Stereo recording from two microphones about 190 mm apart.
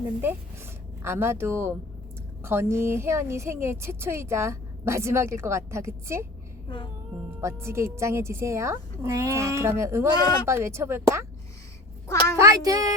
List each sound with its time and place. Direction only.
0.2 s a woman's voice: 10° right (ahead or behind)
6.7 s a sound: 25° left (ahead or behind)
7.4 s a woman's voice: 15° right (ahead or behind)
12.4 s a woman's voice: 15° right (ahead or behind)